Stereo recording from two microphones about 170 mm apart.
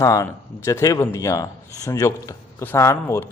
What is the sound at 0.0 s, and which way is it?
A man's voice, 20° left (ahead or behind).